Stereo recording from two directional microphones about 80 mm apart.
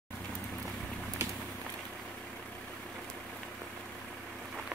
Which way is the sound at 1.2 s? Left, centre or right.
Right.